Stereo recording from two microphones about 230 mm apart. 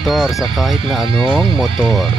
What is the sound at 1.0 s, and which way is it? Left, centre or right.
Speech, right.